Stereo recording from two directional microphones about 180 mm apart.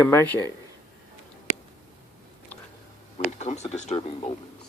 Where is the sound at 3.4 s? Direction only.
40° left (ahead or behind).